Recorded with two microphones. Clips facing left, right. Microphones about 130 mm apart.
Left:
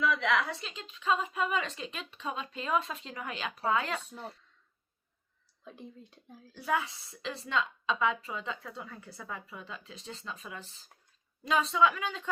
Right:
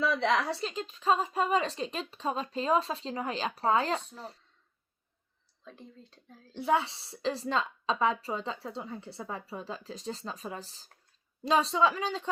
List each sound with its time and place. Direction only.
0.0 s a woman's voice: 35° right (ahead or behind)
5.6 s speech: 15° left (ahead or behind)
6.5 s a woman's voice: 25° right (ahead or behind)